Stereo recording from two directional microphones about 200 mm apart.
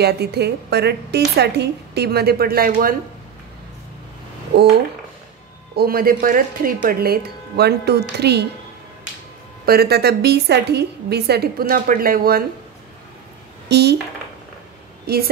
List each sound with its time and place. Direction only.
0.0 s a woman's voice: 55° right (ahead or behind)
4.5 s a sound: 55° right (ahead or behind)
5.8 s a woman's voice: 50° right (ahead or behind)
9.7 s a woman's voice: 50° right (ahead or behind)
13.7 s speech: 55° right (ahead or behind)
15.1 s a woman's voice: 50° right (ahead or behind)